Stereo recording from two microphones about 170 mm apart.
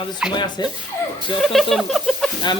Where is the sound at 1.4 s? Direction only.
Centre (ahead or behind).